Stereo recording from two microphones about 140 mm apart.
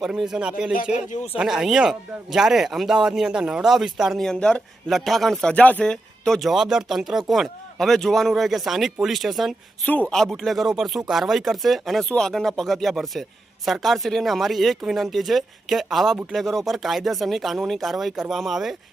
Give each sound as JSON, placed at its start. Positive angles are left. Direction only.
{"t": 0.0, "sound": "speech", "side_deg": -5}
{"t": 1.1, "sound": "speech", "side_deg": 50}
{"t": 1.4, "sound": "speech", "side_deg": -5}
{"t": 9.8, "sound": "speech", "side_deg": 10}